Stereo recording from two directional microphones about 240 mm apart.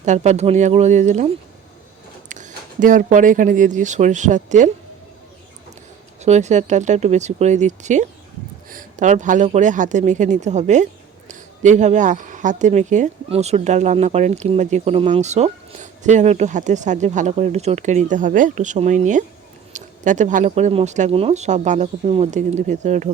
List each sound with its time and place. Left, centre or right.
0.0 s a woman's voice: right
2.3 s speech: right
6.2 s a woman's voice: right